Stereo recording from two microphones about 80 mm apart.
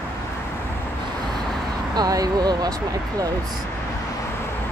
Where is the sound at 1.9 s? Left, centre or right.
Right.